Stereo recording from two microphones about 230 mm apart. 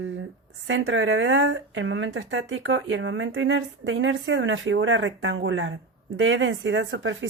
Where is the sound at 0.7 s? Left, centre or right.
Right.